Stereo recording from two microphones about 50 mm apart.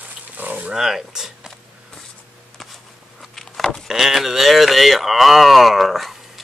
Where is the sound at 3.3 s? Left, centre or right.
Centre.